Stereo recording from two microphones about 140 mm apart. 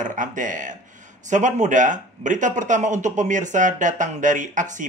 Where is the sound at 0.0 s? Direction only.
65° right (ahead or behind).